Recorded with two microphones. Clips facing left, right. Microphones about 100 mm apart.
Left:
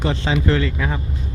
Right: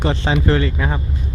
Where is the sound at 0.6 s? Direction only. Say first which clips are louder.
Right 2 dB; 25° right (ahead or behind).